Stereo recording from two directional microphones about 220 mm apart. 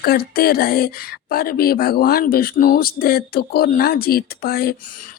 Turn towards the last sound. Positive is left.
turn(degrees=45)  # may be behind; listen again after turning